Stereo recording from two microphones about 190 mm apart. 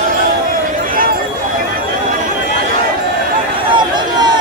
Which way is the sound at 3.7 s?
25° right (ahead or behind).